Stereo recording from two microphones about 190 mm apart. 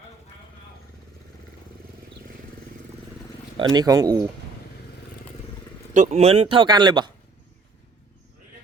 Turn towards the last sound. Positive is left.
turn(degrees=-25)  # may be behind; listen again after turning